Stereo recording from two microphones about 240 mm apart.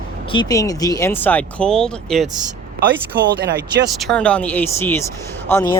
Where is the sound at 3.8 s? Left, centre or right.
Centre.